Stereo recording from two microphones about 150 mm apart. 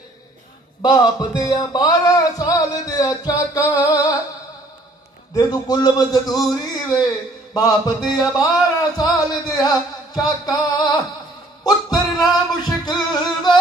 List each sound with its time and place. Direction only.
0.8 s speech: 25° left (ahead or behind)
5.3 s speech: 25° left (ahead or behind)
8.9 s a sound: 25° left (ahead or behind)
10.1 s speech: 25° left (ahead or behind)
11.6 s music: 25° left (ahead or behind)